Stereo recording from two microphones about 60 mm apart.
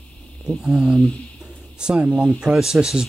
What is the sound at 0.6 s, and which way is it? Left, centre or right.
Speech, centre.